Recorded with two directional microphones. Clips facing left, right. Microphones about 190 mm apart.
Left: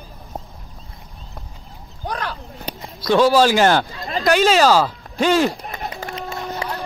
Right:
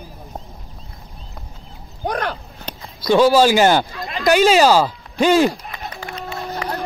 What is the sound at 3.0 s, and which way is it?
Speech, centre (ahead or behind).